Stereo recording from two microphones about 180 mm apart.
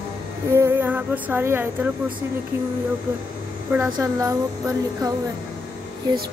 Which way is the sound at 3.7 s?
15° right (ahead or behind).